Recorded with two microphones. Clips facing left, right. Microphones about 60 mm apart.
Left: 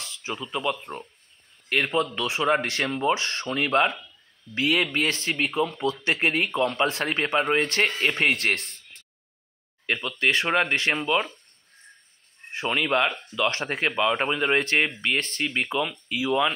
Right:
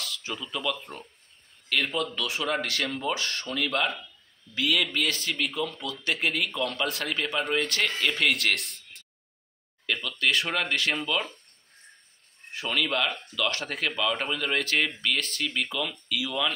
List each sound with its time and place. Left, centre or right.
0.0 s a man's voice: left
9.8 s a man's voice: left
12.5 s speech: left